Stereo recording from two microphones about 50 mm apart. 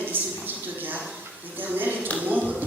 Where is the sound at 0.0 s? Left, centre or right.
Right.